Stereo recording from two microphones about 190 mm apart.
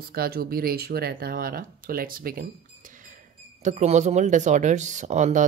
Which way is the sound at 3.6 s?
40° right (ahead or behind).